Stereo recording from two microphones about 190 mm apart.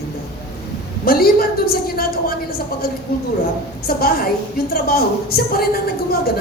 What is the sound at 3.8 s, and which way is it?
A woman's voice, 50° left (ahead or behind).